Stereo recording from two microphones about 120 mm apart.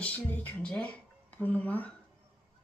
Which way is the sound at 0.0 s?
15° left (ahead or behind).